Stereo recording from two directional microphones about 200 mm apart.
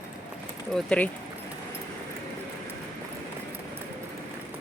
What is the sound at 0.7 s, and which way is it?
Speech, 5° left (ahead or behind).